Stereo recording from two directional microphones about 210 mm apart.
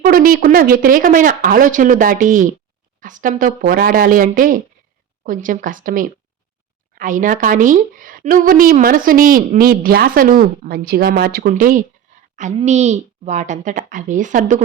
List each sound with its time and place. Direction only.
0.0 s a woman's voice: 40° right (ahead or behind)